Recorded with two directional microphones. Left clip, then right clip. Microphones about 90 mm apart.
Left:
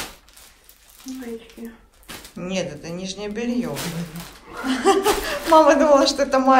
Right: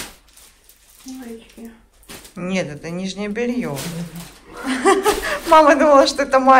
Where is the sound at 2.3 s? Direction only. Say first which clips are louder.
Right 3 dB; 30° left (ahead or behind).